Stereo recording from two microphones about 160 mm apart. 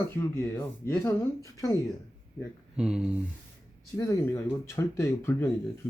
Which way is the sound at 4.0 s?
20° left (ahead or behind).